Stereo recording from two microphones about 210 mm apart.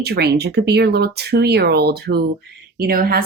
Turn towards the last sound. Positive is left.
turn(degrees=-45)  # may be behind; listen again after turning